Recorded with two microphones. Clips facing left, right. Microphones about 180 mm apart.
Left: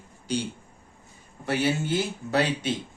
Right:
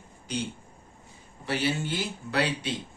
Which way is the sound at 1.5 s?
45° left (ahead or behind).